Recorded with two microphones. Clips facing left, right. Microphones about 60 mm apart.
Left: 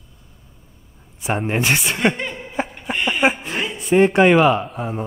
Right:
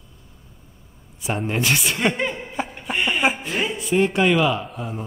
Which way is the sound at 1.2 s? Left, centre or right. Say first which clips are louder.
Left 3 dB; left.